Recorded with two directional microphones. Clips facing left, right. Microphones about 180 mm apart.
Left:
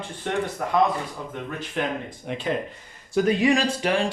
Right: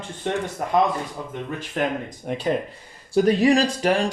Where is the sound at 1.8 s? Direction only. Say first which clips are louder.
Right 3 dB; 45° right (ahead or behind).